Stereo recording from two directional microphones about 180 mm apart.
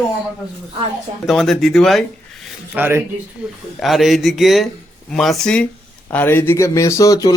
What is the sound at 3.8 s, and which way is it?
Speech, centre (ahead or behind).